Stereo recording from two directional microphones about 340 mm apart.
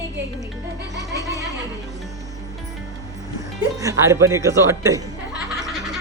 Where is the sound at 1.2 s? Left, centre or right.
Centre.